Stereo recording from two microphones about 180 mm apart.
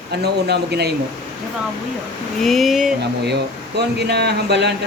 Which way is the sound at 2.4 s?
Centre (ahead or behind).